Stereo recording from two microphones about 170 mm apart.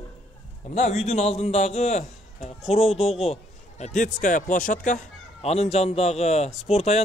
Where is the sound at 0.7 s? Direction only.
45° left (ahead or behind).